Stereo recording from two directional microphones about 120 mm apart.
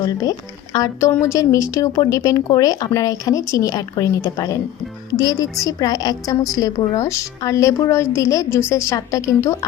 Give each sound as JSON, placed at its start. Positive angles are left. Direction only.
{"t": 0.0, "sound": "a woman's voice", "side_deg": 30}